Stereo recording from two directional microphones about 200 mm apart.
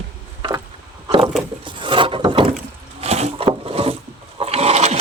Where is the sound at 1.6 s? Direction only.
25° right (ahead or behind).